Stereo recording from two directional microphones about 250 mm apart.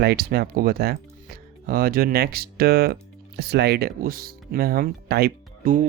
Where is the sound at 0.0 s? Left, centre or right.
Right.